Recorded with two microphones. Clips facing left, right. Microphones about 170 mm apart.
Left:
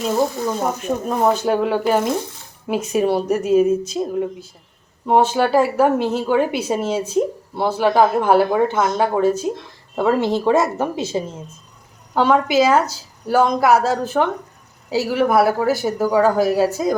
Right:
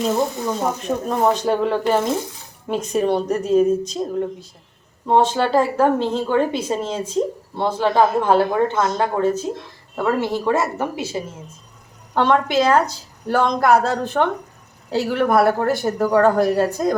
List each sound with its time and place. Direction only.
0.0 s a woman's voice: 5° left (ahead or behind); by 11.2 s 20° left (ahead or behind)
12.1 s speech: 5° left (ahead or behind)